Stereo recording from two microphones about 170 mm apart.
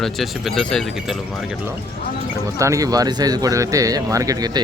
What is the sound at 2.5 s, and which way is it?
Speech, 20° right (ahead or behind).